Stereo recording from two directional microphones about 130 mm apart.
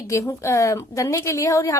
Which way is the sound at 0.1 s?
25° left (ahead or behind).